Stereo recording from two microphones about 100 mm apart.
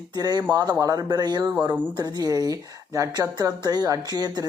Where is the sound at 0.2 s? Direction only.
40° right (ahead or behind).